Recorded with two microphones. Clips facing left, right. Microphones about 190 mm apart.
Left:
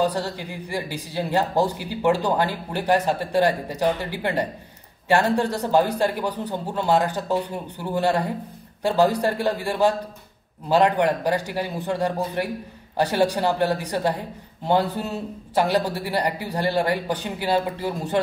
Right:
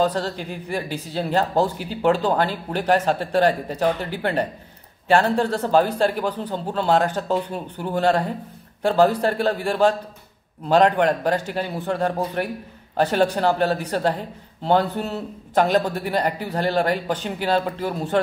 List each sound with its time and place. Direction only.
0.0 s speech: 10° left (ahead or behind)